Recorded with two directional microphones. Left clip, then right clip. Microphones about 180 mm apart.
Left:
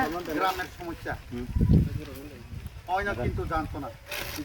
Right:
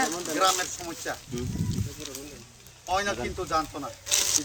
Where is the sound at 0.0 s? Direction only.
40° left (ahead or behind).